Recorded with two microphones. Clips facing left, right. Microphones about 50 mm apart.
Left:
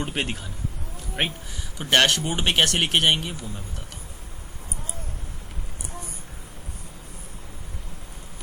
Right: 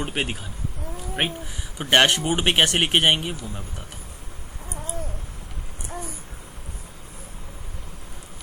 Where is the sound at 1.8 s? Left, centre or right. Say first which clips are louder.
Right 2 dB; centre.